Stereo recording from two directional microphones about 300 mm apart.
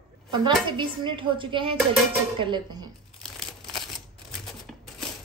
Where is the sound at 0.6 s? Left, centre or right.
Centre.